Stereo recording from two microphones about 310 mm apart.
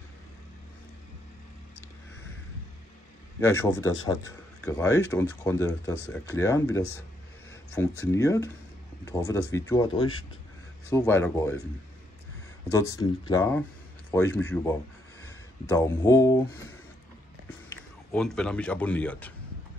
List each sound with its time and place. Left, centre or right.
3.3 s speech: centre
10.9 s speech: centre
12.7 s speech: centre
18.1 s speech: centre